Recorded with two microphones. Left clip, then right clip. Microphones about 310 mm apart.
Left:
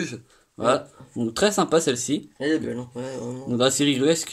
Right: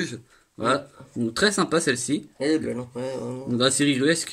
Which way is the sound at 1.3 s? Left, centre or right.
Centre.